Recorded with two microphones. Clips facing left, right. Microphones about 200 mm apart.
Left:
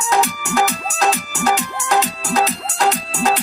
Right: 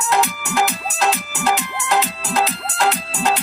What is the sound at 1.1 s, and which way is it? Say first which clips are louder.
Music: left 2 dB; 45° left (ahead or behind).